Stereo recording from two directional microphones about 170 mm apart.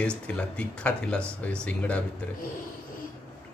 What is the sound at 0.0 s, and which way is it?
Speech, 5° left (ahead or behind).